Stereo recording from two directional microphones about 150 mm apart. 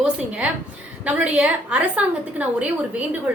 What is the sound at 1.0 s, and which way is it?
A woman's voice, 10° right (ahead or behind).